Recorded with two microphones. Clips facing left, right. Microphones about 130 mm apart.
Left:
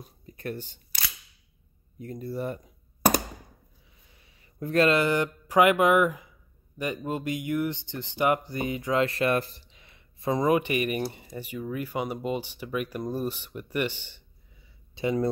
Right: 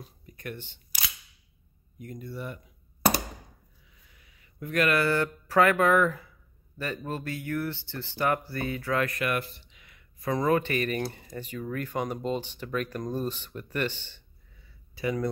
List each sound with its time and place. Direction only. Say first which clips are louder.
0.3 s speech: left 5 dB; 35° left (ahead or behind)
2.0 s speech: left 5 dB; 35° left (ahead or behind)
4.1 s speech: left 1 dB; 30° left (ahead or behind); by 14.2 s 15° left (ahead or behind)
15.0 s speech: left 3 dB; 25° left (ahead or behind)